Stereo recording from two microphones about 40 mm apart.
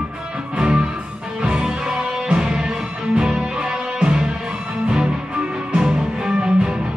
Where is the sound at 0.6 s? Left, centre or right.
Right.